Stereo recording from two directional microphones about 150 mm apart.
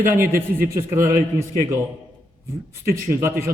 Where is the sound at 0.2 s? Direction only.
15° right (ahead or behind).